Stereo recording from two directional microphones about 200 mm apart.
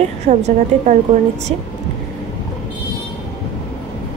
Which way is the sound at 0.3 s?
35° right (ahead or behind).